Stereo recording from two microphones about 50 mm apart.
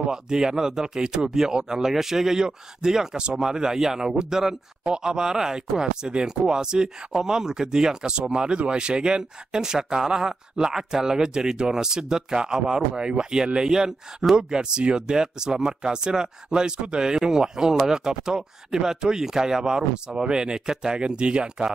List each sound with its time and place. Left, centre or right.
0.0 s speech: centre